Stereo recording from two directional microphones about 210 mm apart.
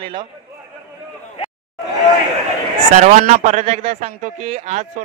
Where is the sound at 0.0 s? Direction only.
20° right (ahead or behind).